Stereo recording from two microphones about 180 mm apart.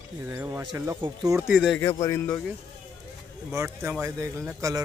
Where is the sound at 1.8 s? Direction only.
15° left (ahead or behind).